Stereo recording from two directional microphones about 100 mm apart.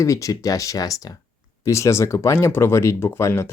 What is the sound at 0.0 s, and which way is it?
Speech, 35° left (ahead or behind).